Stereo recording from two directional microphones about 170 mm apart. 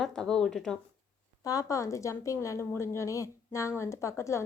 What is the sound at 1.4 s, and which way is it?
A woman's voice, 20° left (ahead or behind).